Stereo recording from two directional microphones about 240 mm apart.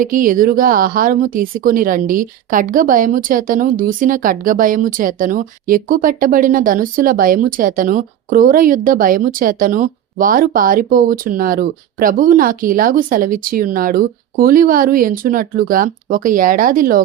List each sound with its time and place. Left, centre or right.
0.0 s a woman's voice: right